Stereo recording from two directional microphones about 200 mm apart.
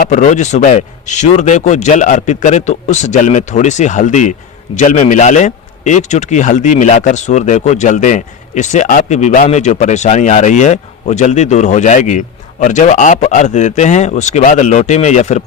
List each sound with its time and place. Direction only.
0.0 s a man's voice: 40° left (ahead or behind)